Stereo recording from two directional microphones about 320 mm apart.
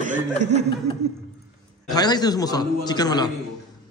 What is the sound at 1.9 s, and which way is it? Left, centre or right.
A man's voice, centre.